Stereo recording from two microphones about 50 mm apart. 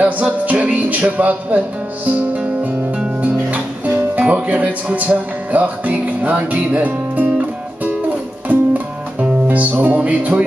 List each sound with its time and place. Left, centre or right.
0.2 s music: right
8.5 s music: right